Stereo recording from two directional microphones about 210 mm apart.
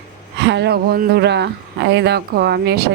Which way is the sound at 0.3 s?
55° right (ahead or behind).